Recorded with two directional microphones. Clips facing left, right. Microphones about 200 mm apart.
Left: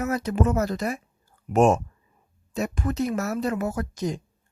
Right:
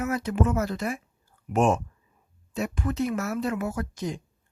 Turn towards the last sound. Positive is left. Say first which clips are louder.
# left 3 dB
turn(degrees=40)  # may be behind; listen again after turning